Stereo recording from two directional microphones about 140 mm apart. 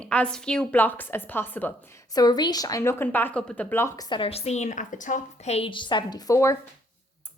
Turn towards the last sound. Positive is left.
turn(degrees=20)  # may be behind; listen again after turning